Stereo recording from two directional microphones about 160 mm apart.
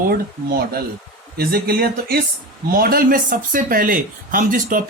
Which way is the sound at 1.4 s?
75° right (ahead or behind).